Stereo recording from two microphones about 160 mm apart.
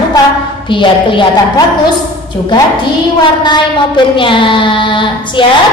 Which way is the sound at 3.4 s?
30° left (ahead or behind).